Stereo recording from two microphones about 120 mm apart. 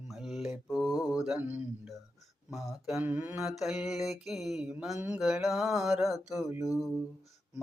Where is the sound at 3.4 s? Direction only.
5° right (ahead or behind).